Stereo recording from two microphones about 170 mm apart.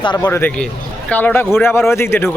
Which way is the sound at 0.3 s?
10° left (ahead or behind).